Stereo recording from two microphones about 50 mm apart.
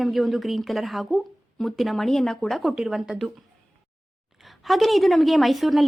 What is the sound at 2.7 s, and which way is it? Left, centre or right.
Speech, centre.